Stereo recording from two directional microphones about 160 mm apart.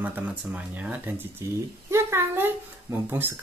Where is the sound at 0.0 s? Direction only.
10° right (ahead or behind).